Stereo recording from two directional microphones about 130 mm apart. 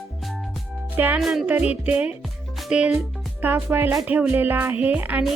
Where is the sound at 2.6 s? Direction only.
5° right (ahead or behind).